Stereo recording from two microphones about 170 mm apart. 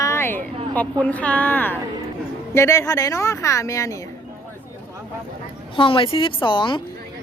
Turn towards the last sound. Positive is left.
turn(degrees=30)  # may be behind; listen again after turning